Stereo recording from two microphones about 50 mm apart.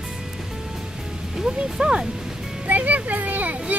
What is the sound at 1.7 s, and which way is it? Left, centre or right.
Speech, centre.